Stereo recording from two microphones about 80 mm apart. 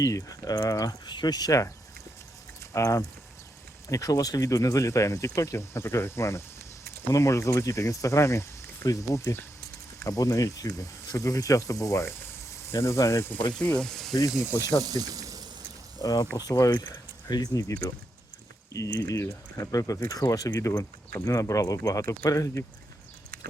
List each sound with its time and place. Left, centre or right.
0.0 s speech: left
1.0 s speech: left
2.7 s speech: left
13.5 s speech: centre
14.8 s speech: right
16.0 s speech: left
16.7 s speech: left